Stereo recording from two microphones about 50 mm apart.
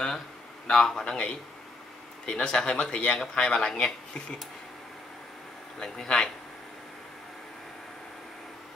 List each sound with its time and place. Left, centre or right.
0.7 s speech: centre
5.8 s speech: centre